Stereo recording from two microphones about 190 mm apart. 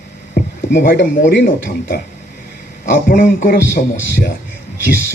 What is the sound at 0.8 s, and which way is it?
Speech, 50° left (ahead or behind).